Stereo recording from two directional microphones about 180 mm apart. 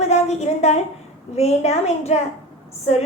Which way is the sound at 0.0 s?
35° left (ahead or behind).